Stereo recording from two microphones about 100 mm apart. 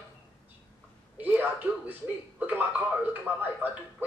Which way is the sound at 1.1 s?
20° right (ahead or behind).